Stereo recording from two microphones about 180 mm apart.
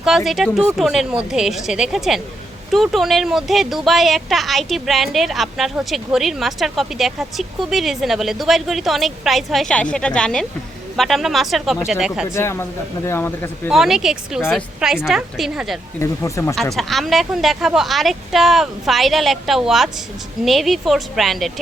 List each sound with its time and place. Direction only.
0.0 s a woman's voice: centre (ahead or behind)
12.3 s speech: 15° left (ahead or behind)
13.7 s a woman's voice: centre (ahead or behind)
16.0 s speech: 15° left (ahead or behind)
16.6 s a woman's voice: centre (ahead or behind)